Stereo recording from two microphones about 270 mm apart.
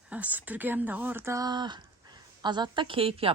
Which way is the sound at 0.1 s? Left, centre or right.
Centre.